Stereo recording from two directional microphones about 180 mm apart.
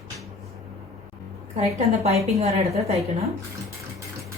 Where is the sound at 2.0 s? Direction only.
35° right (ahead or behind).